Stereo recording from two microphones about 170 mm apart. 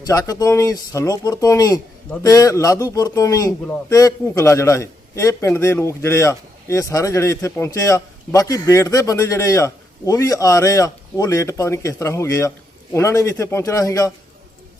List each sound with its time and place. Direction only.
0.0 s a man's voice: 20° left (ahead or behind)